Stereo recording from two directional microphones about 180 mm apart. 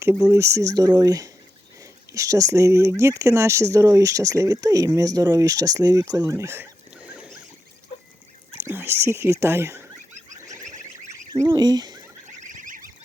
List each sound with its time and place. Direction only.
0.0 s speech: 15° right (ahead or behind)
8.6 s speech: 10° right (ahead or behind)
11.3 s speech: 20° right (ahead or behind)
12.4 s goose: 45° right (ahead or behind)